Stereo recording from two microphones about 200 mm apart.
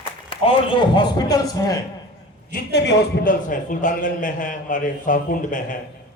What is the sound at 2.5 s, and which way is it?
Speech, 60° left (ahead or behind).